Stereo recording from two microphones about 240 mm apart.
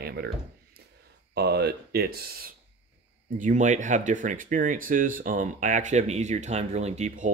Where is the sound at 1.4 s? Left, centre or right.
Right.